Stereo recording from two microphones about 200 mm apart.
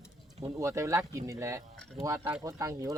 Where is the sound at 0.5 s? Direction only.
15° right (ahead or behind).